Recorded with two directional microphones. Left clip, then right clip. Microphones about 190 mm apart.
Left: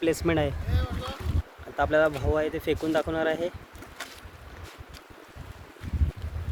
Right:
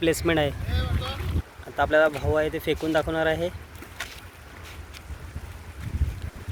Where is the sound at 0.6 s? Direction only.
60° left (ahead or behind).